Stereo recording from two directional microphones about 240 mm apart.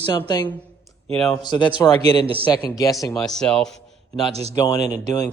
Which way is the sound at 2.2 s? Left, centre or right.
Right.